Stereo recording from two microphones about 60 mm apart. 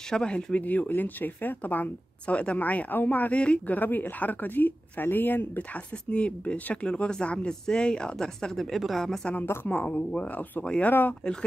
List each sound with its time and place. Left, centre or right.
0.1 s speech: centre; by 5.5 s left
5.6 s speech: centre
9.7 s speech: left